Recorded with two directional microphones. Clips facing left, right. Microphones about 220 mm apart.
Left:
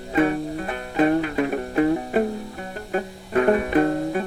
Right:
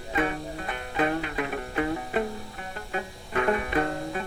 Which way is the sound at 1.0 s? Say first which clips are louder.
Left 8 dB; 35° left (ahead or behind).